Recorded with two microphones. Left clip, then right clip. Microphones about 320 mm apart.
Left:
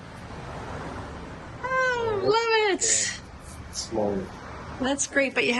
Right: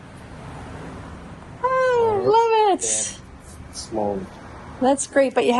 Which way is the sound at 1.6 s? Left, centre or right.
Centre.